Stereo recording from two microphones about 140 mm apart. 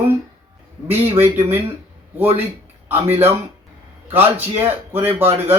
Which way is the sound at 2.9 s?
15° right (ahead or behind).